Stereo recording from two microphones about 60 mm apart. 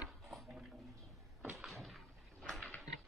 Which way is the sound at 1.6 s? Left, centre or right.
Centre.